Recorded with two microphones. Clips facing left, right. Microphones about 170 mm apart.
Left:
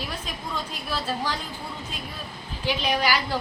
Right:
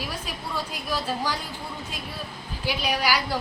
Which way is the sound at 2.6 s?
10° right (ahead or behind).